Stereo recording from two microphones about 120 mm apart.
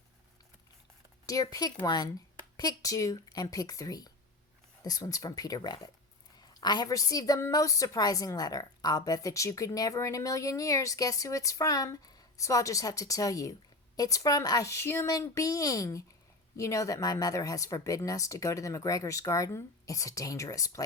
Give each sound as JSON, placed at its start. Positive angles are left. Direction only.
{"t": 1.3, "sound": "a woman's voice", "side_deg": 30}